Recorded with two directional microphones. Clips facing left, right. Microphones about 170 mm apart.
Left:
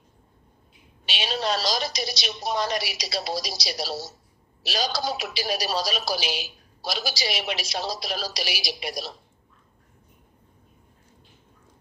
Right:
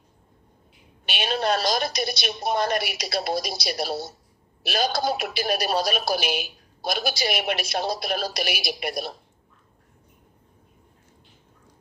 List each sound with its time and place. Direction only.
1.0 s a woman's voice: 55° right (ahead or behind)